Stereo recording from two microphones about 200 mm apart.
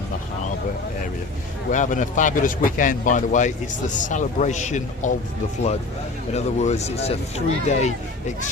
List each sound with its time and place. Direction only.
1.7 s a man's voice: 40° left (ahead or behind)
6.3 s a man's voice: 35° left (ahead or behind)